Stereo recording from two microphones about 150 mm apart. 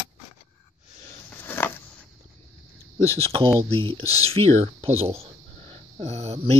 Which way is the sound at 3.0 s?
20° left (ahead or behind).